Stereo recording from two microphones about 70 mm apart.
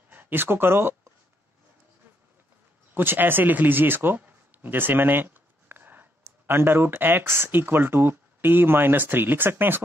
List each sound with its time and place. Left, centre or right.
0.1 s speech: right
2.9 s speech: right